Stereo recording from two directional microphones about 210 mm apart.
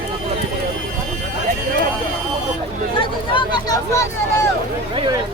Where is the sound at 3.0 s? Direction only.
20° left (ahead or behind).